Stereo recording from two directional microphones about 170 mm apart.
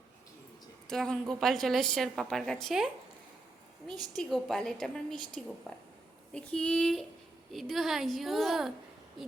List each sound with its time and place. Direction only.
0.9 s a woman's voice: 5° left (ahead or behind)
4.1 s a woman's voice: centre (ahead or behind)